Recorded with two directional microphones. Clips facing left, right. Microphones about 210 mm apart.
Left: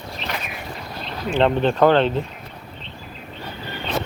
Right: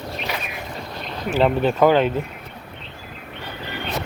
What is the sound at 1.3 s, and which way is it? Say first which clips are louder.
Speech: even; 5° right (ahead or behind).